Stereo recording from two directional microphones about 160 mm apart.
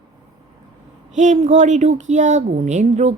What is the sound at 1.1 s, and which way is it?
Speech, 50° right (ahead or behind).